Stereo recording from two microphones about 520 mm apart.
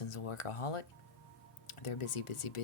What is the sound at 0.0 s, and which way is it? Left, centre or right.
Speech, left.